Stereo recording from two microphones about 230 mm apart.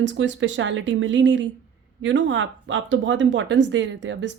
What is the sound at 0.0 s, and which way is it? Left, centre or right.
Speech, right.